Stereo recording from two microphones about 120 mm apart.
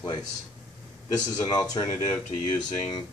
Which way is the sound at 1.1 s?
35° left (ahead or behind).